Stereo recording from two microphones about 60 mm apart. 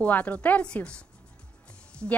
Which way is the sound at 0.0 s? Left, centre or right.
Left.